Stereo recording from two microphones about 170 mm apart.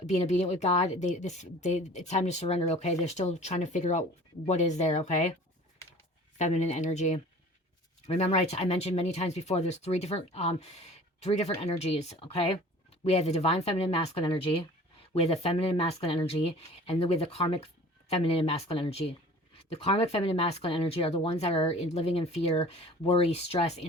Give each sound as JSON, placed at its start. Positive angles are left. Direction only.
{"t": 0.0, "sound": "speech", "side_deg": 40}
{"t": 6.4, "sound": "speech", "side_deg": 40}